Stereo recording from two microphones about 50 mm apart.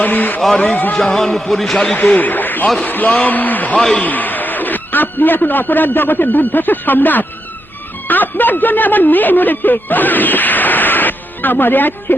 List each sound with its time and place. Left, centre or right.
0.0 s a sound: left
0.6 s a man's voice: left
0.9 s a man's voice: centre
2.1 s a man's voice: left